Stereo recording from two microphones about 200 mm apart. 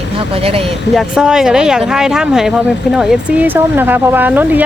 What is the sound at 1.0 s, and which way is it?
Speech, 5° right (ahead or behind).